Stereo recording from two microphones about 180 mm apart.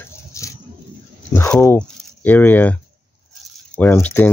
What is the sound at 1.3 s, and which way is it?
Speech, 10° left (ahead or behind).